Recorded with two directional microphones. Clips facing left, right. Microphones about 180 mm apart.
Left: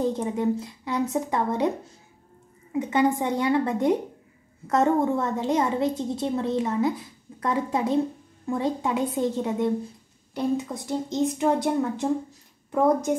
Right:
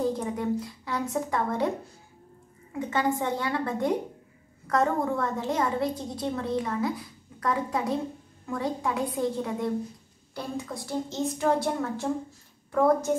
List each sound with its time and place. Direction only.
0.0 s a woman's voice: 20° left (ahead or behind)
2.7 s a woman's voice: 20° left (ahead or behind)